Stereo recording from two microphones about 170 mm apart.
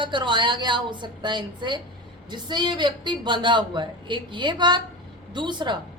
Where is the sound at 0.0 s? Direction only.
30° right (ahead or behind).